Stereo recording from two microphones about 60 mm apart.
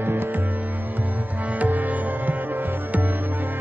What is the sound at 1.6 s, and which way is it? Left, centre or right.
Music, right.